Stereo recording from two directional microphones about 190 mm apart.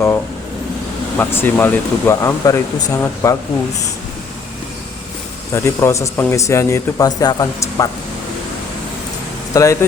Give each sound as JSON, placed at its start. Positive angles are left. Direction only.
{"t": 1.2, "sound": "speech", "side_deg": 10}
{"t": 5.5, "sound": "speech", "side_deg": 15}
{"t": 9.5, "sound": "speech", "side_deg": 15}